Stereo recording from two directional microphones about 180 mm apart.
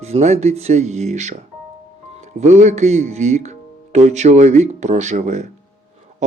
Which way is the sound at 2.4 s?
40° right (ahead or behind).